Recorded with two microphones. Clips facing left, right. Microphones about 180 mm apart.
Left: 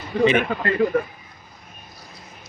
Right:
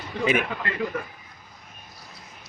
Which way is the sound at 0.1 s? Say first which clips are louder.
Left 8 dB; 45° left (ahead or behind).